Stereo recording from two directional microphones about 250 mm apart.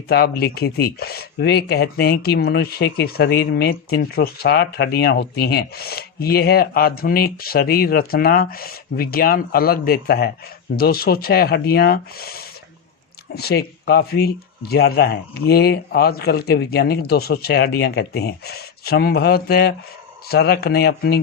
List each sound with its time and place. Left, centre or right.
0.1 s speech: left